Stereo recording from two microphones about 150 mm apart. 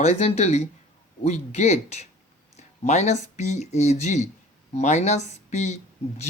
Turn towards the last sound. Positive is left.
turn(degrees=50)  # may be behind; listen again after turning